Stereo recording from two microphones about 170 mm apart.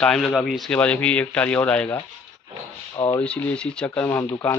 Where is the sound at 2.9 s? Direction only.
25° left (ahead or behind).